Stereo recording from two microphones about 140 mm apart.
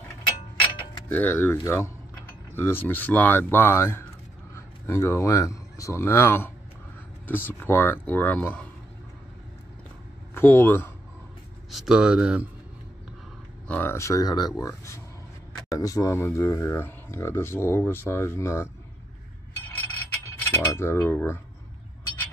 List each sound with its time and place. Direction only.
1.0 s speech: 15° left (ahead or behind)
1.6 s cutlery: 15° left (ahead or behind)
4.6 s speech: 20° left (ahead or behind)
10.3 s speech: 15° left (ahead or behind)
11.7 s speech: 5° right (ahead or behind)
13.7 s speech: 15° left (ahead or behind)
20.2 s cutlery: 15° left (ahead or behind)